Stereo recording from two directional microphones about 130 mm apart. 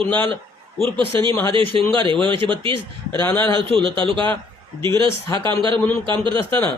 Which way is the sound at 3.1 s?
20° left (ahead or behind).